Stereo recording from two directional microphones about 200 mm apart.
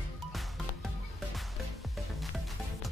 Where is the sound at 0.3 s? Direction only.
Centre (ahead or behind).